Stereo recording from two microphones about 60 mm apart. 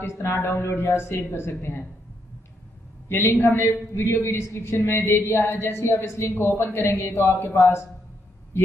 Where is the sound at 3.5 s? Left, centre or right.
Left.